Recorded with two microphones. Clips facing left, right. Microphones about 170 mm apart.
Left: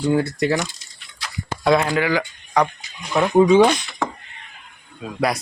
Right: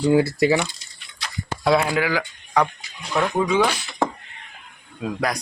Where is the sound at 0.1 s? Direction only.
5° right (ahead or behind).